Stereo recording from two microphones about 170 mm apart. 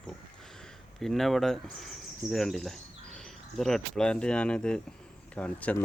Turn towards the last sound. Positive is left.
turn(degrees=10)  # may be behind; listen again after turning